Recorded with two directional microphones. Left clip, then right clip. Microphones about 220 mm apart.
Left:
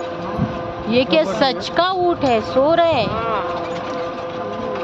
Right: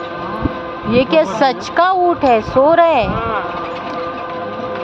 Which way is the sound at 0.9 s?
5° right (ahead or behind).